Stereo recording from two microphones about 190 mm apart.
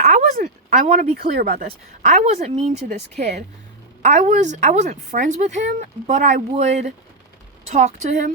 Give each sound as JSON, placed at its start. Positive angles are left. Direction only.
{"t": 0.0, "sound": "a sound", "side_deg": -40}
{"t": 1.1, "sound": "speech", "side_deg": -55}
{"t": 2.0, "sound": "a woman's voice", "side_deg": -35}